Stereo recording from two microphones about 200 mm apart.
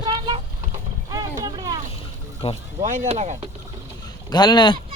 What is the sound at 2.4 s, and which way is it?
Speech, 30° left (ahead or behind).